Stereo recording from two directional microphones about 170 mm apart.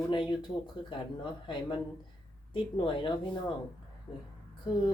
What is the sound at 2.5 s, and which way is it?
Speech, 30° left (ahead or behind).